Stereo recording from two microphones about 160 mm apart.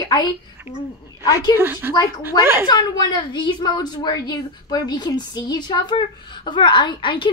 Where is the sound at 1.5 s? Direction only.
15° right (ahead or behind).